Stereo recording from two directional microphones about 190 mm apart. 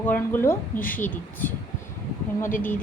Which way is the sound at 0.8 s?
45° left (ahead or behind).